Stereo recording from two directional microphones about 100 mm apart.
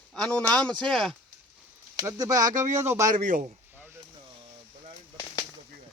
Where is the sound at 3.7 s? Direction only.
20° right (ahead or behind).